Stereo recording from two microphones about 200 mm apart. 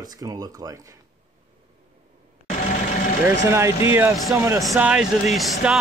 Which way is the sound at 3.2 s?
15° right (ahead or behind).